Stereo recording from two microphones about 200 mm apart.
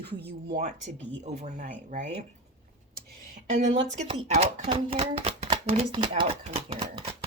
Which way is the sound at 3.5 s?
30° right (ahead or behind).